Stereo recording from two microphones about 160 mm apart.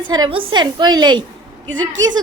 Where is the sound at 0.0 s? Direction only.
25° right (ahead or behind).